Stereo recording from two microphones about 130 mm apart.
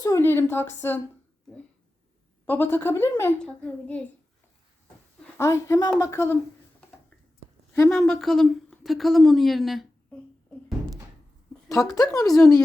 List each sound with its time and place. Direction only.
0.0 s speech: 20° left (ahead or behind)
2.5 s speech: 15° left (ahead or behind)
3.3 s speech: 10° left (ahead or behind)
5.4 s speech: 25° left (ahead or behind)
8.0 s a woman's voice: 5° left (ahead or behind)
11.7 s speech: 25° left (ahead or behind)